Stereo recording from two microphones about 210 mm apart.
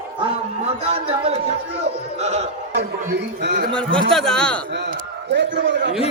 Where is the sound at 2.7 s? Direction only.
50° right (ahead or behind).